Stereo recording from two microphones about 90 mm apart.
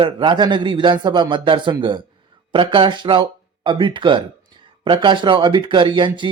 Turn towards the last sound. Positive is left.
turn(degrees=-60)  # may be behind; listen again after turning